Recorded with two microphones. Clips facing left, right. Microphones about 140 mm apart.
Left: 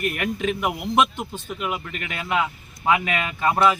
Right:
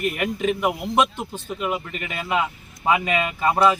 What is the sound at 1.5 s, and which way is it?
Speech, centre (ahead or behind).